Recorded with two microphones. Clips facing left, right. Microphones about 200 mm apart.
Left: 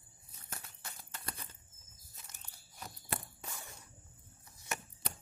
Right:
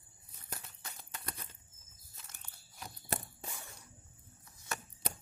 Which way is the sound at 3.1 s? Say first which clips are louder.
Right 2 dB; 40° right (ahead or behind).